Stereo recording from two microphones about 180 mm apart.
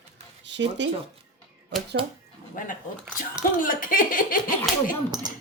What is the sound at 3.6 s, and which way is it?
Speech, 50° left (ahead or behind).